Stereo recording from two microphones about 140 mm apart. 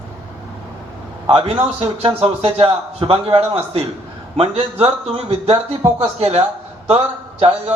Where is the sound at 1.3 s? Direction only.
45° right (ahead or behind).